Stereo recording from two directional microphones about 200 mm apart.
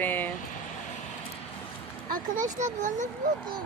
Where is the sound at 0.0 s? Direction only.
10° left (ahead or behind).